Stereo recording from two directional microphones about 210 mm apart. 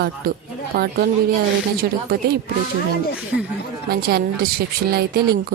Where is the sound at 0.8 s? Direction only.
50° right (ahead or behind).